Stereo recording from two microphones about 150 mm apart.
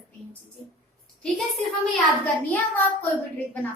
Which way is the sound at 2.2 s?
10° left (ahead or behind).